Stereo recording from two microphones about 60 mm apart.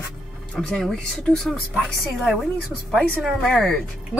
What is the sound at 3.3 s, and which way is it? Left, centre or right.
Speech, centre.